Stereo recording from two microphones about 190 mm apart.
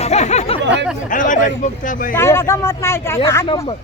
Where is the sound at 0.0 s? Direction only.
35° left (ahead or behind).